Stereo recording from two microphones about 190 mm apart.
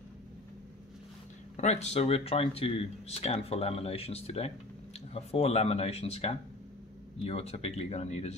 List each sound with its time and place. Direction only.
1.6 s speech: 35° left (ahead or behind)